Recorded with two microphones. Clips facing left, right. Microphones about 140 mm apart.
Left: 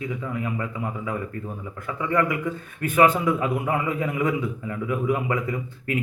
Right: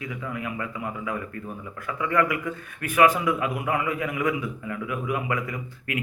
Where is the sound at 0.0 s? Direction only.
25° left (ahead or behind).